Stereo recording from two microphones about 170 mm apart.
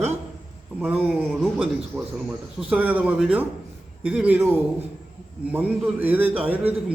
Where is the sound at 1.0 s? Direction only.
Centre (ahead or behind).